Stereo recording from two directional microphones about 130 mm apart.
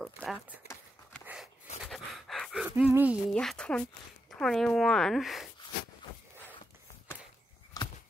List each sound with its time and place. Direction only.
0.0 s speech: centre (ahead or behind)
1.2 s a sound: 5° right (ahead or behind)
1.8 s pant: centre (ahead or behind)
2.7 s speech: 15° right (ahead or behind)
3.3 s speech: 5° left (ahead or behind)
7.8 s a sound: 30° left (ahead or behind)